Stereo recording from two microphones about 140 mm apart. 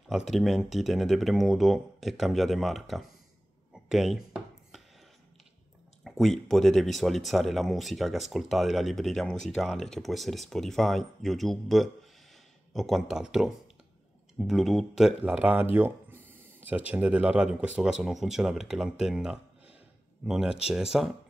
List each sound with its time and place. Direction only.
0.1 s speech: centre (ahead or behind)
3.7 s a sound: centre (ahead or behind)
6.0 s speech: centre (ahead or behind)